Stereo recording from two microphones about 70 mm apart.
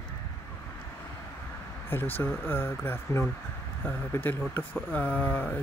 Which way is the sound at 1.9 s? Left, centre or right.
Left.